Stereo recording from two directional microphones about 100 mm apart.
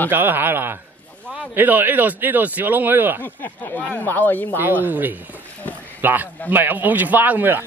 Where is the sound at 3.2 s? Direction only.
15° left (ahead or behind).